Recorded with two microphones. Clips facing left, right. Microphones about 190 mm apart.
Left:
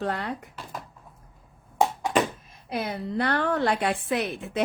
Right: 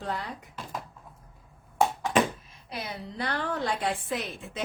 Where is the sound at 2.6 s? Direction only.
55° left (ahead or behind).